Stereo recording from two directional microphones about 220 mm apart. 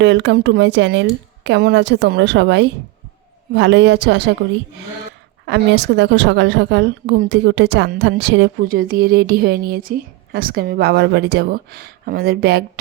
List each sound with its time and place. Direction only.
0.0 s a woman's voice: 55° right (ahead or behind)
5.5 s a woman's voice: 50° right (ahead or behind)